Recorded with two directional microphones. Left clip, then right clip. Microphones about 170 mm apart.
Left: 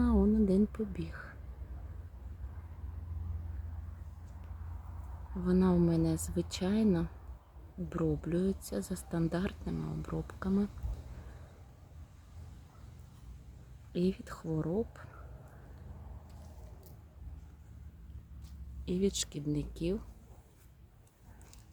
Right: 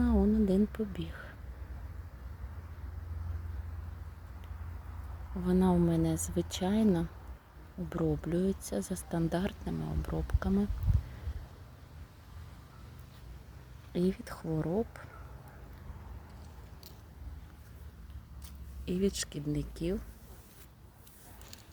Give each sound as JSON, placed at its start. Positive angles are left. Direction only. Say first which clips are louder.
{"t": 0.0, "sound": "whispering", "louder": "even", "side_deg": 5}
{"t": 5.5, "sound": "speech", "louder": "right 1 dB", "side_deg": 0}
{"t": 13.9, "sound": "speech", "louder": "right 1 dB", "side_deg": 0}
{"t": 18.9, "sound": "speech", "louder": "even", "side_deg": -5}